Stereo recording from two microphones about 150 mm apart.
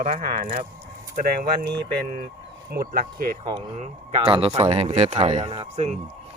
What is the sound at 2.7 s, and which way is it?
Speech, 90° right.